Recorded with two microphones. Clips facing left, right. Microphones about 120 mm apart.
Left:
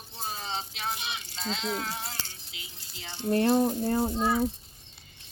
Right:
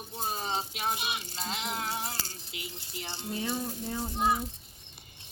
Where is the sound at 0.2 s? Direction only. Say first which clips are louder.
Right 2 dB; 15° right (ahead or behind).